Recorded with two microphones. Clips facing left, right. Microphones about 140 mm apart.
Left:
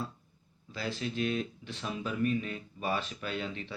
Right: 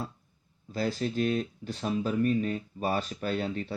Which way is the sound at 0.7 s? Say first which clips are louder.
Right 6 dB; 45° right (ahead or behind).